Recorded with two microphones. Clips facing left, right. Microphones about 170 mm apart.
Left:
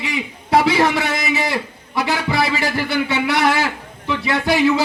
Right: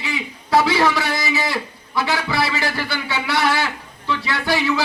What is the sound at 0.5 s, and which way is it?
A man's voice, 20° left (ahead or behind).